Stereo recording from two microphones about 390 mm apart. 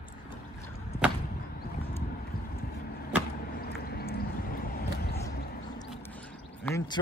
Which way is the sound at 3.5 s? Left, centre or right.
Left.